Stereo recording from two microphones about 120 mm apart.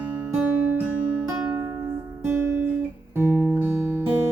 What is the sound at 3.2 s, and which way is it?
Music, 20° right (ahead or behind).